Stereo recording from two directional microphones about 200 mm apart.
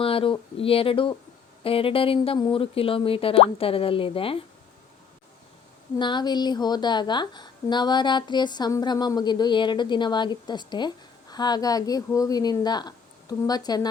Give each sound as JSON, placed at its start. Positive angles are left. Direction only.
{"t": 0.0, "sound": "a woman's voice", "side_deg": 25}
{"t": 6.0, "sound": "a woman's voice", "side_deg": 25}